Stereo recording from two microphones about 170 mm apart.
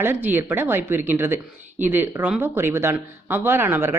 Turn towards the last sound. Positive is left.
turn(degrees=-15)  # may be behind; listen again after turning